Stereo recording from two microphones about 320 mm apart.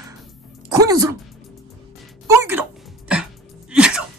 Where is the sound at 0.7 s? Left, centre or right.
Centre.